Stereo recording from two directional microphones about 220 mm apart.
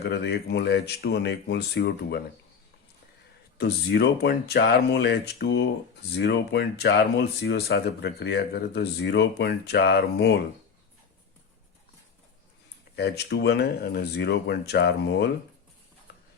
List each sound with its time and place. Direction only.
0.0 s speech: 50° left (ahead or behind)
3.6 s speech: 50° left (ahead or behind)
13.0 s speech: 50° left (ahead or behind)